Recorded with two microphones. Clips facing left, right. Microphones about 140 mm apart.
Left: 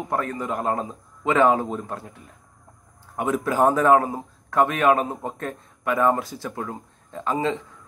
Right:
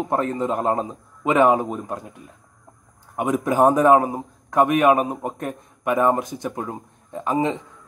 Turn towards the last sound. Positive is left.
turn(degrees=-20)  # may be behind; listen again after turning